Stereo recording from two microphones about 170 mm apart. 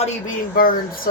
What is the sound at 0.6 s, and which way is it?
Speech, 55° left (ahead or behind).